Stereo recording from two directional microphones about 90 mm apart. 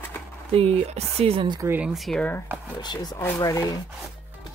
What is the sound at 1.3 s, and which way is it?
Speech, 70° right (ahead or behind).